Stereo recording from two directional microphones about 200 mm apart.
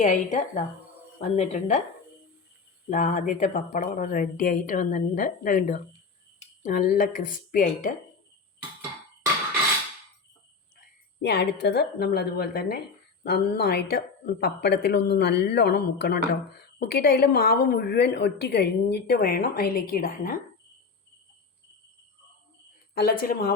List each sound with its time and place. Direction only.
0.0 s speech: 35° left (ahead or behind)
2.9 s a woman's voice: 40° left (ahead or behind)
11.2 s a woman's voice: 55° left (ahead or behind)
23.2 s a woman's voice: 45° left (ahead or behind)